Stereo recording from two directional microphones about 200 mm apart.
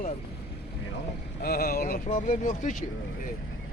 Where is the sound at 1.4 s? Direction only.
50° left (ahead or behind).